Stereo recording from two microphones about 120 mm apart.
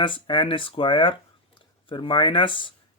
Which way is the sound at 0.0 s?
45° left (ahead or behind).